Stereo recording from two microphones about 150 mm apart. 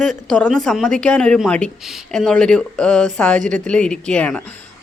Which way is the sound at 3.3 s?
55° right (ahead or behind).